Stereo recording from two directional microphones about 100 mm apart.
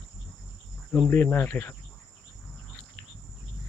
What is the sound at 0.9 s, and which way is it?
Speech, 20° left (ahead or behind).